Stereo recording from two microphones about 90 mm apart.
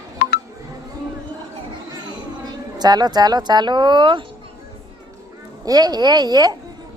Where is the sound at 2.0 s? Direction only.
50° right (ahead or behind).